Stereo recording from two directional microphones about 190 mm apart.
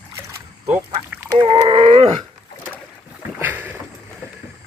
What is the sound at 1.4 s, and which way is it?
Dog, 30° right (ahead or behind).